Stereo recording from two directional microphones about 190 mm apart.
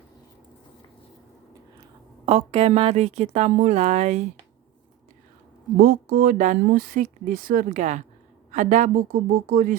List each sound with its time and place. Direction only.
2.2 s a woman's voice: 30° right (ahead or behind)
5.8 s a woman's voice: 50° right (ahead or behind)